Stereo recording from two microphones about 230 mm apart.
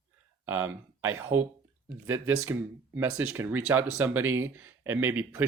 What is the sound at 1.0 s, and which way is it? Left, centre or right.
Speech, right.